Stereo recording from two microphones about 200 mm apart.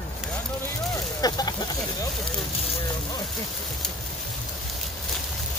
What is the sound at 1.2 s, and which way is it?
Speech, 20° left (ahead or behind).